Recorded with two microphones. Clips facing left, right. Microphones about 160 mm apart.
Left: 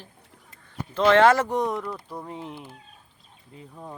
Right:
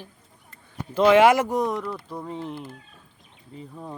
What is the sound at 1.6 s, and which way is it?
Mantra, centre (ahead or behind).